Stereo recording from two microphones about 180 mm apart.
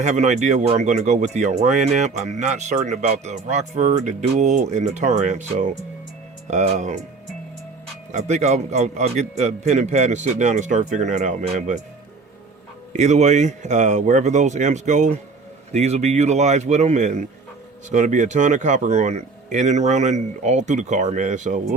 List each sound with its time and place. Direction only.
0.0 s speech: 40° right (ahead or behind)
8.1 s speech: 40° right (ahead or behind)
12.9 s speech: 40° right (ahead or behind)